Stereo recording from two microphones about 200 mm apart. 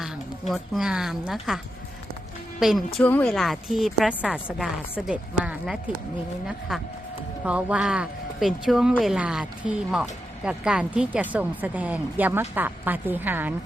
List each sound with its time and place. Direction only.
0.0 s a woman's voice: centre (ahead or behind)